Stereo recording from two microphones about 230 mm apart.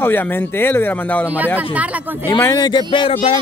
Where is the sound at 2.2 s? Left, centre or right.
Centre.